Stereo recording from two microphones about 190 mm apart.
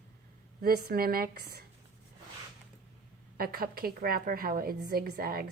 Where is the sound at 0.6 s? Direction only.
55° right (ahead or behind).